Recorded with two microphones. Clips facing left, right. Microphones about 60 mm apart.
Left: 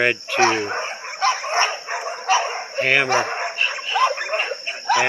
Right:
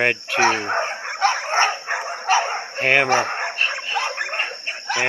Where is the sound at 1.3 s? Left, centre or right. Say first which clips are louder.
Even; right.